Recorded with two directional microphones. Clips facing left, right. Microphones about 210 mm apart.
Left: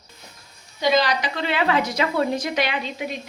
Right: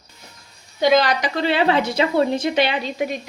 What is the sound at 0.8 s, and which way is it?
Speech, 55° right (ahead or behind).